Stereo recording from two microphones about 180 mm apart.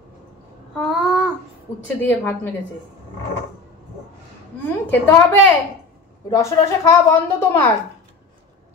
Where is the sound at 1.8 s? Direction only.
10° left (ahead or behind).